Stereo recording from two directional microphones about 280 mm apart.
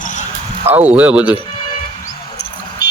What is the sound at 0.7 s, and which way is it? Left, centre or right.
Speech, centre.